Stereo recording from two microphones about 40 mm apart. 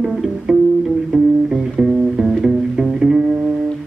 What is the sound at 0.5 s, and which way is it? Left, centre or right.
Music, centre.